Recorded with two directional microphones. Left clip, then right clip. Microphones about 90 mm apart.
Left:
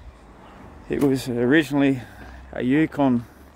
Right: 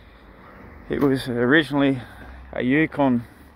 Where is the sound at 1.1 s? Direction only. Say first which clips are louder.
Right 2 dB; 30° left (ahead or behind).